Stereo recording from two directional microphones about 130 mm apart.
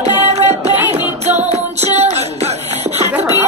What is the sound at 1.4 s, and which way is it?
Music, 55° right (ahead or behind).